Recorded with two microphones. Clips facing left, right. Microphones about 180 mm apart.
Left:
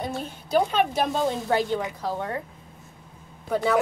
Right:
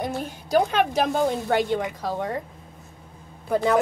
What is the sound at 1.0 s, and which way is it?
A woman's voice, 10° right (ahead or behind).